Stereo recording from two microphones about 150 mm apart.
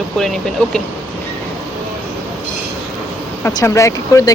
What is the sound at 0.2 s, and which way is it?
Speech, 5° left (ahead or behind).